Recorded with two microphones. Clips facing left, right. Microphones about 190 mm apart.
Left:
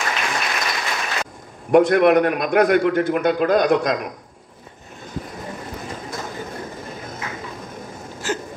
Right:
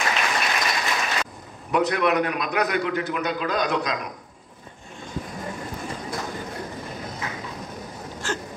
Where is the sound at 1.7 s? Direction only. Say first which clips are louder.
Left 8 dB; 50° left (ahead or behind).